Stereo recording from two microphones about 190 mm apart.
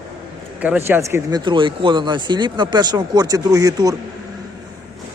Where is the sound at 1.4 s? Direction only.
25° right (ahead or behind).